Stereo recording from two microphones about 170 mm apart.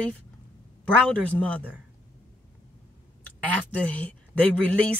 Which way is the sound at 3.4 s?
5° left (ahead or behind).